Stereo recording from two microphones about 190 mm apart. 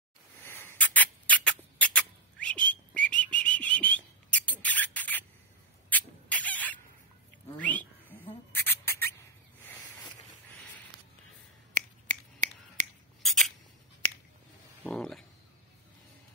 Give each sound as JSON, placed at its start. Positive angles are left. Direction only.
{"t": 0.4, "sound": "rodents", "side_deg": 10}
{"t": 7.5, "sound": "bird", "side_deg": 10}
{"t": 11.7, "sound": "finger snapping", "side_deg": -40}
{"t": 13.2, "sound": "scissors", "side_deg": 0}
{"t": 14.9, "sound": "a sound", "side_deg": 5}